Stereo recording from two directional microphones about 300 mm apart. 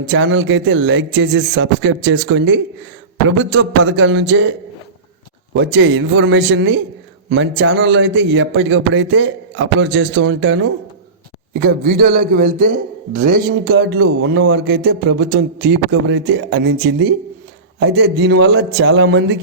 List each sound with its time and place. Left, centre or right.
0.1 s a man's voice: right
5.5 s a man's voice: right